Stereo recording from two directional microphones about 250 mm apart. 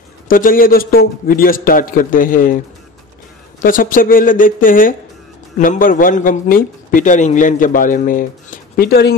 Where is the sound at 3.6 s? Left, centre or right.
Left.